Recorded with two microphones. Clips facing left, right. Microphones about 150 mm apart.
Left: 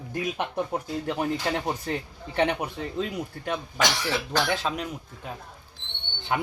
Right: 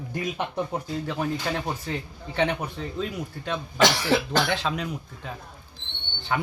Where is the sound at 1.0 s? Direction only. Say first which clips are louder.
Left 2 dB; 20° left (ahead or behind).